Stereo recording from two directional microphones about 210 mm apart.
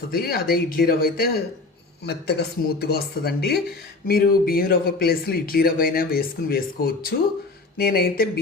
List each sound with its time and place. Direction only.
0.1 s speech: 45° left (ahead or behind)